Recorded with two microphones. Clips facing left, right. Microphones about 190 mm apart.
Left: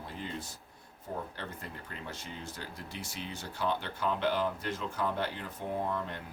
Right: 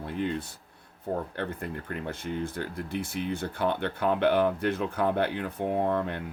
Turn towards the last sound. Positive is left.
turn(degrees=-60)  # may be behind; listen again after turning